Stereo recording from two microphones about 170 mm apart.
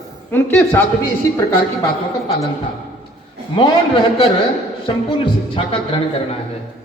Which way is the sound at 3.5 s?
30° left (ahead or behind).